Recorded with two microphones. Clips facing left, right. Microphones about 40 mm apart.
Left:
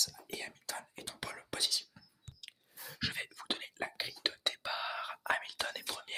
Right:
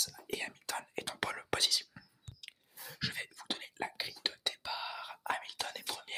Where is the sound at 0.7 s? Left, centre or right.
Right.